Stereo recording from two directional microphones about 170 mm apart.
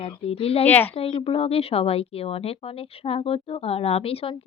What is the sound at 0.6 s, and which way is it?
Speech, 10° left (ahead or behind).